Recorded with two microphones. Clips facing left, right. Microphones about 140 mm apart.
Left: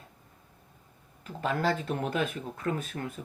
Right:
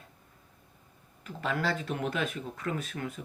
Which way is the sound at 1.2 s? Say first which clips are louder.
Left 3 dB; 40° left (ahead or behind).